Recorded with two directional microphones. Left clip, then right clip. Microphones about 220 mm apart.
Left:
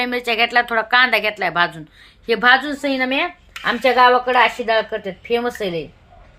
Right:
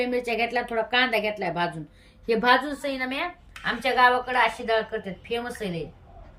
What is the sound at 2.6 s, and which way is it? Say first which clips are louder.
A woman's voice: left 9 dB; 25° left (ahead or behind).